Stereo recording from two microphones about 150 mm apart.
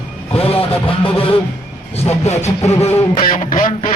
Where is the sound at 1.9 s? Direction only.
45° left (ahead or behind).